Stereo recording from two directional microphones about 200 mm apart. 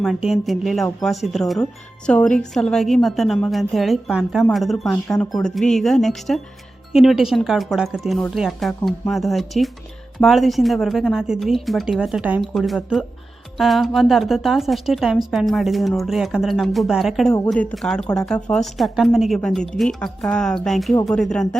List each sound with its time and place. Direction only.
0.0 s a woman's voice: centre (ahead or behind)